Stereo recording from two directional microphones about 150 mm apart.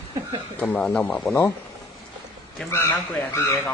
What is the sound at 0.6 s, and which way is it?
Speech, 10° left (ahead or behind).